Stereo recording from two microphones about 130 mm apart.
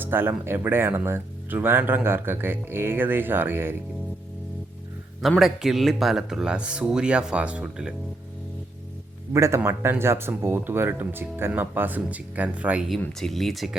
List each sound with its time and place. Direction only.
0.0 s speech: 15° right (ahead or behind)
5.4 s speech: centre (ahead or behind)
9.3 s speech: 20° right (ahead or behind)
13.0 s speech: 5° left (ahead or behind)